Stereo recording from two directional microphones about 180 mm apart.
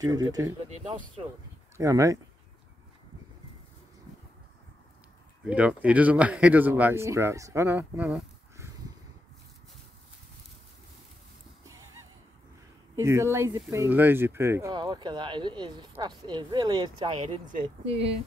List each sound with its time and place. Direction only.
0.0 s speech: 20° right (ahead or behind)
1.8 s speech: 20° right (ahead or behind)
5.4 s speech: 5° right (ahead or behind)
13.0 s speech: 15° right (ahead or behind); by 18.1 s 35° right (ahead or behind)